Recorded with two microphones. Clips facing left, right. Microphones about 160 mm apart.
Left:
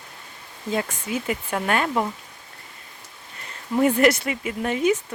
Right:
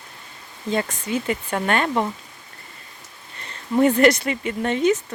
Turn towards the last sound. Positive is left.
turn(degrees=10)  # may be behind; listen again after turning